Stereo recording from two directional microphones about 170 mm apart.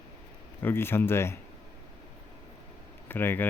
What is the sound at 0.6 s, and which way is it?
Speech, 15° left (ahead or behind).